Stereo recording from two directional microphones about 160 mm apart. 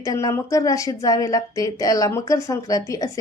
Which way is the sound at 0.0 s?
20° left (ahead or behind).